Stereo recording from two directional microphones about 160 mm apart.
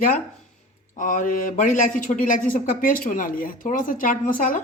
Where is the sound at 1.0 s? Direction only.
55° left (ahead or behind).